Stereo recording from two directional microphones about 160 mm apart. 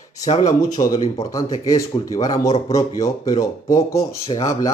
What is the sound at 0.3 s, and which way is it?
Speech, 50° left (ahead or behind).